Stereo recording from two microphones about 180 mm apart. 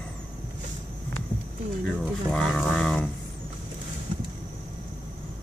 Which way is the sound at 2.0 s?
Centre (ahead or behind).